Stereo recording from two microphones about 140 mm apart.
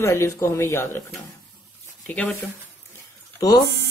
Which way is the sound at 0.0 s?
20° left (ahead or behind).